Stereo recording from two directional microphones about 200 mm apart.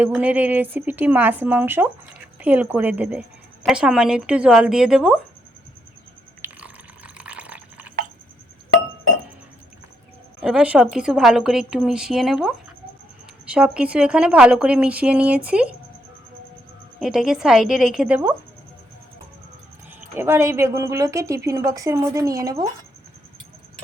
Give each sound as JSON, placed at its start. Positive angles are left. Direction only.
{"t": 0.0, "sound": "a woman's voice", "side_deg": -5}
{"t": 6.4, "sound": "a sound", "side_deg": -5}
{"t": 10.4, "sound": "a woman's voice", "side_deg": -5}
{"t": 17.0, "sound": "a woman's voice", "side_deg": -5}
{"t": 20.0, "sound": "speech", "side_deg": -10}